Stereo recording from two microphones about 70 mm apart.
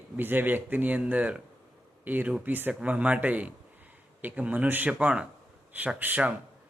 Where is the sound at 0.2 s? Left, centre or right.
Right.